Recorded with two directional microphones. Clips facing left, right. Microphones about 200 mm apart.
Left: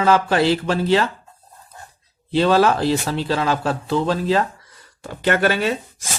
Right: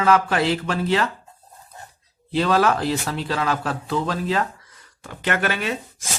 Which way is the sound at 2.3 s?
30° left (ahead or behind).